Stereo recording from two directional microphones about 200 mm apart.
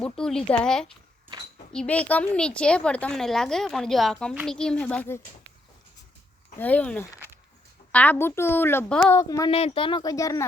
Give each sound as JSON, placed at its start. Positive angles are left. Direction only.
{"t": 0.0, "sound": "a woman's voice", "side_deg": 5}
{"t": 6.6, "sound": "a woman's voice", "side_deg": 10}
{"t": 9.5, "sound": "speech", "side_deg": 30}